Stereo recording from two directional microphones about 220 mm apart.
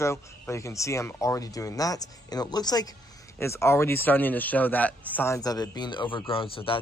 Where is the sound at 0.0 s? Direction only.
15° left (ahead or behind).